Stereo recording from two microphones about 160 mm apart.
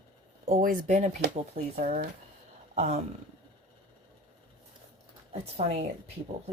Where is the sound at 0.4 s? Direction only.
60° right (ahead or behind).